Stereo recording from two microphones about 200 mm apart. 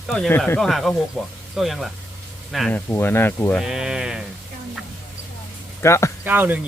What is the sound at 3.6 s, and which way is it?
Speech, centre (ahead or behind).